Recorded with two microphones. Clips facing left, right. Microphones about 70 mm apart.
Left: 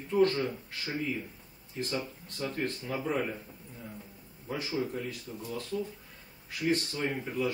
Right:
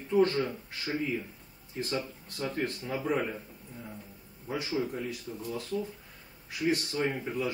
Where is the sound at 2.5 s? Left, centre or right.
Centre.